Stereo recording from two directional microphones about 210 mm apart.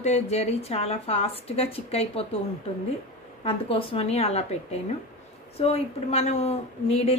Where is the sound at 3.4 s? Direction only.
25° left (ahead or behind).